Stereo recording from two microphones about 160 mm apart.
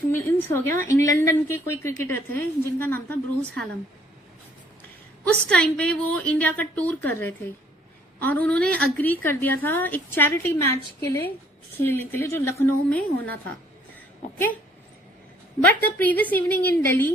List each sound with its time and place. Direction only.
0.1 s a woman's voice: 15° left (ahead or behind)
5.3 s a woman's voice: 5° left (ahead or behind)
15.6 s a woman's voice: 10° left (ahead or behind)